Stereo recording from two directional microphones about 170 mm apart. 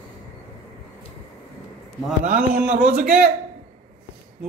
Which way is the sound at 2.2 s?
50° right (ahead or behind).